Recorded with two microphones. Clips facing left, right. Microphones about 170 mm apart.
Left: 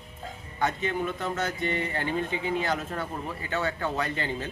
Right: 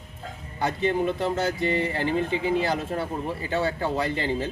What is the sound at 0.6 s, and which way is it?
Speech, 30° right (ahead or behind).